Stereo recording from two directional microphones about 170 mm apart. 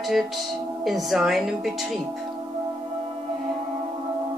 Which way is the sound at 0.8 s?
Centre (ahead or behind).